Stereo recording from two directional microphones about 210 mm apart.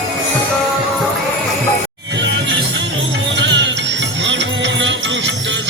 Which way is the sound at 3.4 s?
60° right (ahead or behind).